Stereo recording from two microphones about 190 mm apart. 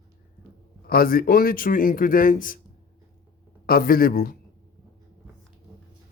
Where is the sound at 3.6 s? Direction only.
50° left (ahead or behind).